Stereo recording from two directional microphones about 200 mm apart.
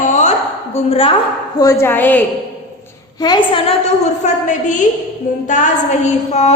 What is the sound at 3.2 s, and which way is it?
Speech, 20° left (ahead or behind).